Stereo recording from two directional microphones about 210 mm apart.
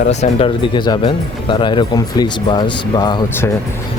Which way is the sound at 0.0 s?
30° left (ahead or behind).